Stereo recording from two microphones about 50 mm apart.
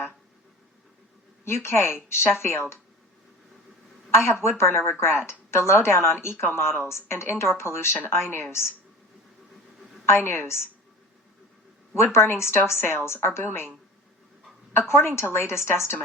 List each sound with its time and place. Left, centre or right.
1.5 s a woman's voice: left
4.2 s a woman's voice: left
10.1 s speech: left
10.4 s a woman's voice: left
11.9 s a woman's voice: left
13.4 s speech: left
14.7 s a woman's voice: left